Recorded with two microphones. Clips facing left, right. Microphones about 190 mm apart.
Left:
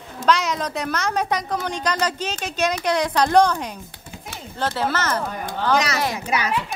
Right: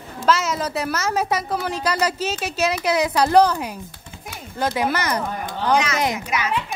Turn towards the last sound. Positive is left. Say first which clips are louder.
# left 1 dB
turn(degrees=35)  # may be behind; listen again after turning